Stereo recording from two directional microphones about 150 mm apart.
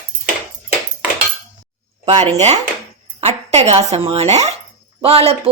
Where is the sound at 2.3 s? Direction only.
45° right (ahead or behind).